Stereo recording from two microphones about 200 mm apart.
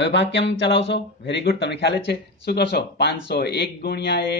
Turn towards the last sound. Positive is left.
turn(degrees=60)  # may be behind; listen again after turning